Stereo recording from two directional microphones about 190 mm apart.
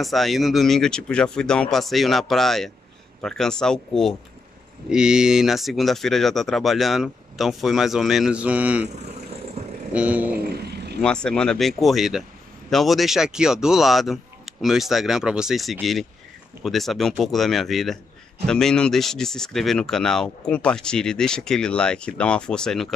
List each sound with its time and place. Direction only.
0.0 s speech: centre (ahead or behind)
9.9 s vehicle: 10° right (ahead or behind)
10.4 s a sound: 55° right (ahead or behind)
11.0 s speech: 5° left (ahead or behind)